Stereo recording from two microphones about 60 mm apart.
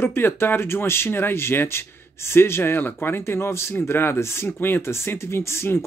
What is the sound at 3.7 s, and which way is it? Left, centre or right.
Speech, left.